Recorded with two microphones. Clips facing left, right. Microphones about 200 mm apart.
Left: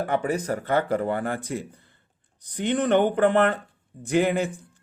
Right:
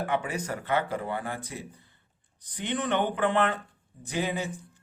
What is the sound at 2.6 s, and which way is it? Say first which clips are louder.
Speech: left 7 dB; 45° left (ahead or behind).